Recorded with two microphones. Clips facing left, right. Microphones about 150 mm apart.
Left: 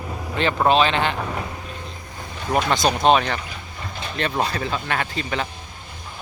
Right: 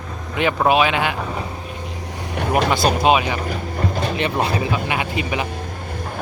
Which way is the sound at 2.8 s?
5° right (ahead or behind).